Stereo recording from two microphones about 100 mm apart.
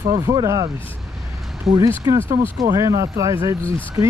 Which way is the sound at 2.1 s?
30° right (ahead or behind).